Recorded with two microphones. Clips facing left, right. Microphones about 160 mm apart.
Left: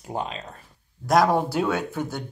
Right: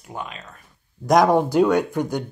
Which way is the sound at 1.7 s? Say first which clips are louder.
Right 6 dB; 15° right (ahead or behind).